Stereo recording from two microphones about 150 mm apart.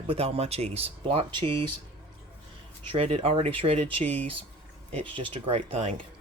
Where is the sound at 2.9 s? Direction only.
40° right (ahead or behind).